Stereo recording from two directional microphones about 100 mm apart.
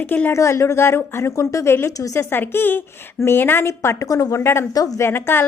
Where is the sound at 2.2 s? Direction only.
20° left (ahead or behind).